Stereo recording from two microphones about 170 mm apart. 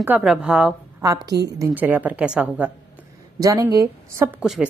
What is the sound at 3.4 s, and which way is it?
A woman's voice, 20° right (ahead or behind).